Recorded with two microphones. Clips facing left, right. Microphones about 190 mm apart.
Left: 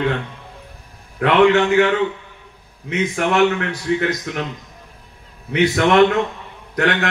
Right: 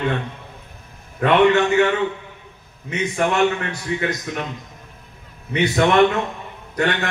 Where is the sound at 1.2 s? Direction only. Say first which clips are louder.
Left 1 dB; 90° left.